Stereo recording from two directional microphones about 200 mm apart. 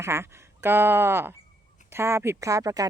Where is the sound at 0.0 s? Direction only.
15° right (ahead or behind).